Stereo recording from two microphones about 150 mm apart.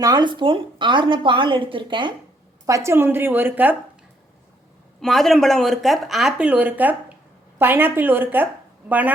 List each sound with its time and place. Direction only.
0.0 s a woman's voice: 30° right (ahead or behind)
2.6 s a woman's voice: 20° right (ahead or behind)
4.9 s a woman's voice: centre (ahead or behind)